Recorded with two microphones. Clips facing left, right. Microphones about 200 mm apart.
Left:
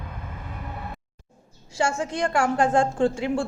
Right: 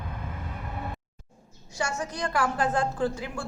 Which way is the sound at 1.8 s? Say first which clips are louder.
Left 6 dB; 25° left (ahead or behind).